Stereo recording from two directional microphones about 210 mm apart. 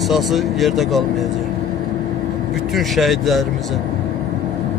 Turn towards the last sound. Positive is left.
turn(degrees=0)  # may be behind; listen again after turning